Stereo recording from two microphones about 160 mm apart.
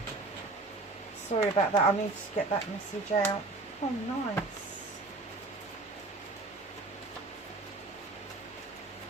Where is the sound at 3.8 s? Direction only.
45° left (ahead or behind).